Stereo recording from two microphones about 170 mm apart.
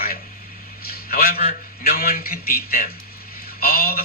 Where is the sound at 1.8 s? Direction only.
60° left (ahead or behind).